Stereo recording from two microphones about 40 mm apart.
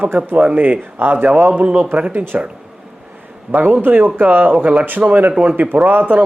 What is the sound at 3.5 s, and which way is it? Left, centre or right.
A man's voice, right.